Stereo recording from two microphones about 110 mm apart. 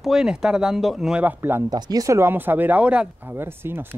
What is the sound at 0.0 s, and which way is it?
Speech, 5° right (ahead or behind).